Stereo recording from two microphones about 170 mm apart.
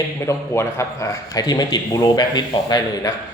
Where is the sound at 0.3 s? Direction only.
15° left (ahead or behind).